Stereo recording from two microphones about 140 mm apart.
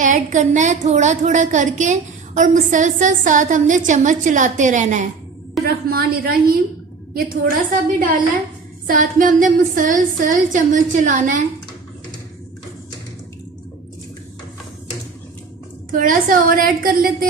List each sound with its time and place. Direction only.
0.0 s a woman's voice: 65° right (ahead or behind)
5.6 s a woman's voice: 90° right
7.7 s speech: 75° right (ahead or behind)
15.9 s a woman's voice: 80° right